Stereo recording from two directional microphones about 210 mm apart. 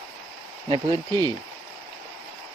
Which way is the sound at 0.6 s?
20° right (ahead or behind).